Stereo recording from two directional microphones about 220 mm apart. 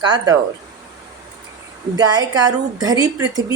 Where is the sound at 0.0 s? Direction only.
20° right (ahead or behind).